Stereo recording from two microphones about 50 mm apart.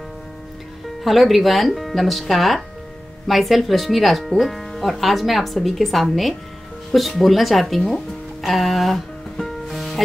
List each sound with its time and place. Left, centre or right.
1.0 s speech: centre
6.9 s music: centre